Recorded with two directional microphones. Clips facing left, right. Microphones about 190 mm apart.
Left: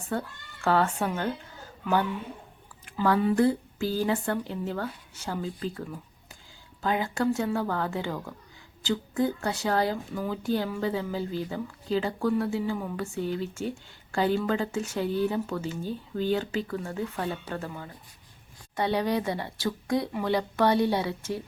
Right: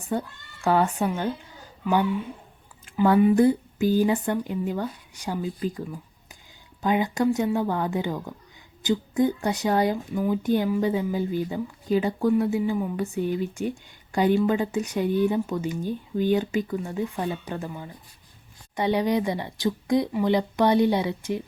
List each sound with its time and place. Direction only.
0.1 s speech: 15° right (ahead or behind)
2.8 s speech: 25° right (ahead or behind)